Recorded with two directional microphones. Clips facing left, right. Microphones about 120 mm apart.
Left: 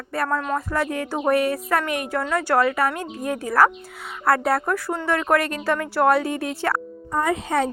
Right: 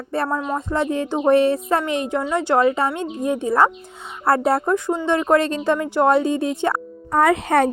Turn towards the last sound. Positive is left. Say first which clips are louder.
# right 6 dB
turn(degrees=-60)  # may be behind; listen again after turning